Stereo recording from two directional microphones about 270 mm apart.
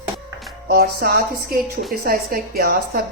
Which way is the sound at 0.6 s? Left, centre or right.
Right.